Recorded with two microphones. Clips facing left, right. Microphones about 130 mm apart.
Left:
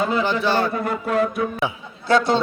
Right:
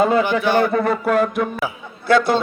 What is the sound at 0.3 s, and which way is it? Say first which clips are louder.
Speech: right 3 dB; 15° right (ahead or behind).